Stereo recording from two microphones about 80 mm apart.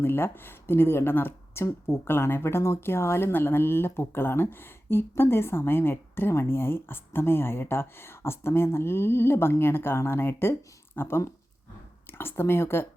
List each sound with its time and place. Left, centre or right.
0.0 s speech: left